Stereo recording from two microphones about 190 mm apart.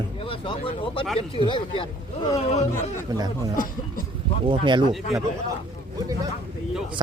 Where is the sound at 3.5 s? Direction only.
45° left (ahead or behind).